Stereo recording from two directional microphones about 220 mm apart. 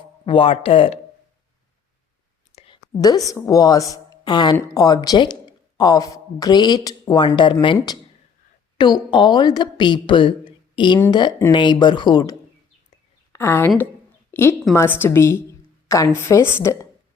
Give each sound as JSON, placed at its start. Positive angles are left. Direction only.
{"t": 0.3, "sound": "a woman's voice", "side_deg": 25}
{"t": 2.6, "sound": "a woman's voice", "side_deg": 20}
{"t": 14.3, "sound": "a sound", "side_deg": 10}
{"t": 14.8, "sound": "speech", "side_deg": 10}